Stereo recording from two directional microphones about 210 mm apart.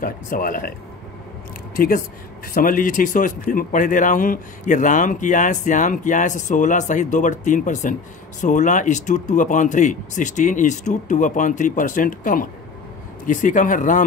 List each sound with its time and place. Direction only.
0.0 s speech: 40° left (ahead or behind)
1.8 s speech: 45° left (ahead or behind)